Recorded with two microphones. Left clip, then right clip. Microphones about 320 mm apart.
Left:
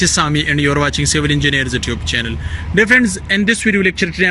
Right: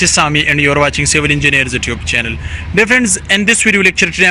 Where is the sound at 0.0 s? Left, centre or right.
Centre.